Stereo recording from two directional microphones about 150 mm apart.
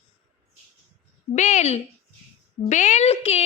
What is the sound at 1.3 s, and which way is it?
A woman's voice, 50° left (ahead or behind).